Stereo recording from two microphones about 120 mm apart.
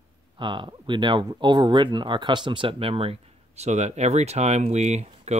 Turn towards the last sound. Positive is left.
turn(degrees=-65)  # may be behind; listen again after turning